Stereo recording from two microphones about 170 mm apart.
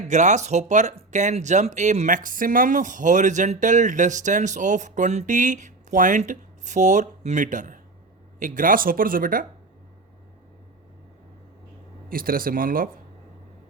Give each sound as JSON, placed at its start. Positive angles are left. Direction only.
{"t": 0.1, "sound": "speech", "side_deg": -45}
{"t": 12.0, "sound": "speech", "side_deg": -55}